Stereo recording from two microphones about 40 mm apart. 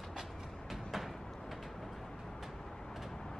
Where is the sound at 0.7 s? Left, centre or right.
Centre.